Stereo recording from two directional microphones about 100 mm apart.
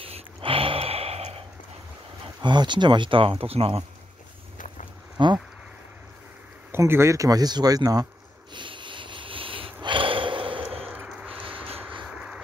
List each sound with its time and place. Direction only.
0.0 s snort: 70° right (ahead or behind); by 1.3 s 85° right
2.4 s speech: 50° right (ahead or behind); by 3.8 s 80° right
5.2 s speech: 55° right (ahead or behind)
6.7 s speech: 25° right (ahead or behind)
8.5 s snort: 55° right (ahead or behind)
10.9 s a sound: 15° right (ahead or behind)
11.4 s vehicle: 60° right (ahead or behind)
12.0 s vehicle: 5° right (ahead or behind)